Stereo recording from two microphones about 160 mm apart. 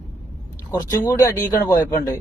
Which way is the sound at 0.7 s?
25° left (ahead or behind).